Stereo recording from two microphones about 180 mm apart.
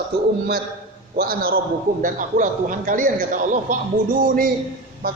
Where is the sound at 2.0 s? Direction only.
45° right (ahead or behind).